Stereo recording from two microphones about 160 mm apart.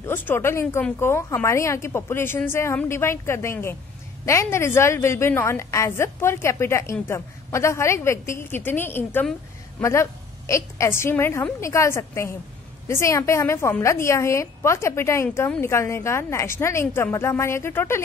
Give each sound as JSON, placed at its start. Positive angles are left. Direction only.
{"t": 0.0, "sound": "a woman's voice", "side_deg": 15}